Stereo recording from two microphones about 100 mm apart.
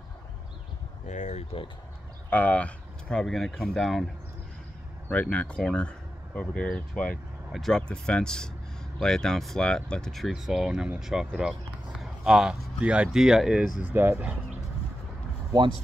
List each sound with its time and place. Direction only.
2.2 s speech: 15° left (ahead or behind); by 4.0 s centre (ahead or behind)
5.1 s speech: 10° left (ahead or behind); by 13.9 s 10° right (ahead or behind)